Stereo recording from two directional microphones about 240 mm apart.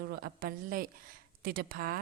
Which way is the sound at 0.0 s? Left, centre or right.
Right.